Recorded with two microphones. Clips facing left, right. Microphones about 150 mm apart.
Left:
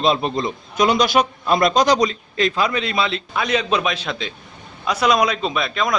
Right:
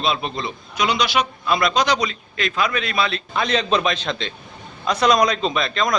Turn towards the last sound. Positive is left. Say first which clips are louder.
# even
turn(degrees=5)  # may be behind; listen again after turning